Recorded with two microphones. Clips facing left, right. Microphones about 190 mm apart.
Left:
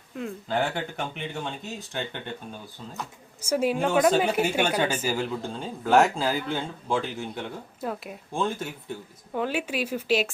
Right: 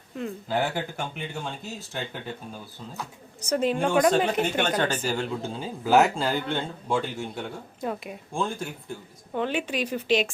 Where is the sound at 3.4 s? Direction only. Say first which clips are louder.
Even; 10° left (ahead or behind).